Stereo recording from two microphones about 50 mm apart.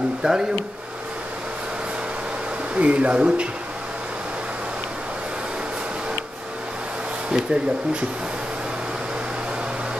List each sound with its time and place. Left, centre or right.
0.2 s speech: centre
2.7 s speech: right
7.2 s speech: centre